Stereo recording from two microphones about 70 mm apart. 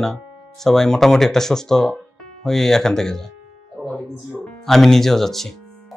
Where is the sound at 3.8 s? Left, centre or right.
Right.